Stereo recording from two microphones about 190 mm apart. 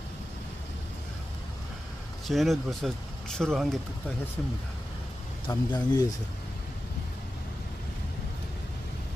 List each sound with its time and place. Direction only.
2.2 s speech: centre (ahead or behind)
5.5 s speech: 20° left (ahead or behind)